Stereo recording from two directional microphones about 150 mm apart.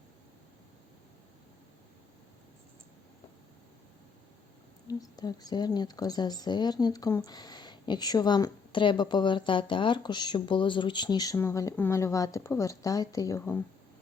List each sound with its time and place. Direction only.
4.9 s a woman's voice: 25° left (ahead or behind)